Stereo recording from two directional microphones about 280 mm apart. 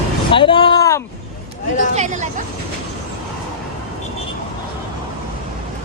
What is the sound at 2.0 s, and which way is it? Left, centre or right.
Speech, right.